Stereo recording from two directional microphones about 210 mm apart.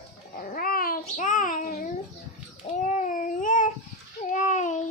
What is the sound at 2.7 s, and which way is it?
Babbling, 35° left (ahead or behind).